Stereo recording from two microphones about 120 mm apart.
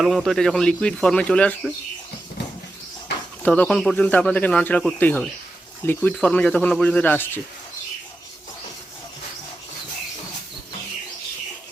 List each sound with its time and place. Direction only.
0.0 s speech: centre (ahead or behind)
3.4 s speech: 10° left (ahead or behind)